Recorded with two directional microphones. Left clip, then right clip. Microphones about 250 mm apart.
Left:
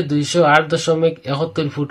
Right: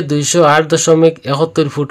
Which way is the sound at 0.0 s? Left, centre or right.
Right.